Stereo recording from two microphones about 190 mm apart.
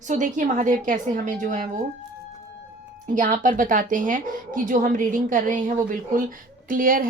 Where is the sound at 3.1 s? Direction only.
40° right (ahead or behind).